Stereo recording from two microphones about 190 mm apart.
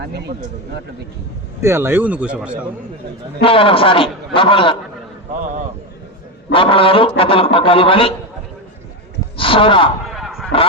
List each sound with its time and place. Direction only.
1.6 s speech: 10° right (ahead or behind)
3.4 s a man's voice: 30° left (ahead or behind)
6.5 s a man's voice: 30° left (ahead or behind)
9.4 s a man's voice: 30° left (ahead or behind)
10.1 s a sound: centre (ahead or behind)